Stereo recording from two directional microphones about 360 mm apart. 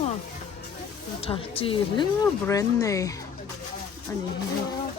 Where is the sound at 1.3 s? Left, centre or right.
Centre.